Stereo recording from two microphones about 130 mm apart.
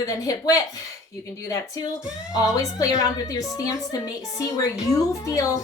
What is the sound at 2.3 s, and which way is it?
A woman's voice, 25° left (ahead or behind).